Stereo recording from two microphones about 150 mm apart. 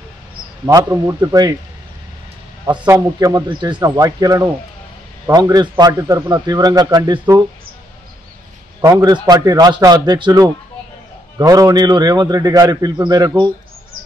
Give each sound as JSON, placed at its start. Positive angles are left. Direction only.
{"t": 0.7, "sound": "a man's voice", "side_deg": -20}
{"t": 2.9, "sound": "a man's voice", "side_deg": -20}
{"t": 8.8, "sound": "a man's voice", "side_deg": -25}